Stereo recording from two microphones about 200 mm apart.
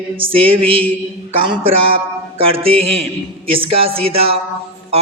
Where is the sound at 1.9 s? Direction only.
30° right (ahead or behind).